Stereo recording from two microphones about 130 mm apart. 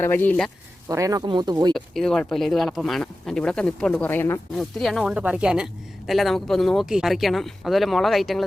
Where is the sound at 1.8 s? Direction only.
5° left (ahead or behind).